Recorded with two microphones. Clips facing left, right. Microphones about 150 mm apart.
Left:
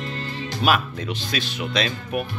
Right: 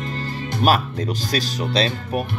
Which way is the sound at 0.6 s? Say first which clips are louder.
Right 3 dB; 50° right (ahead or behind).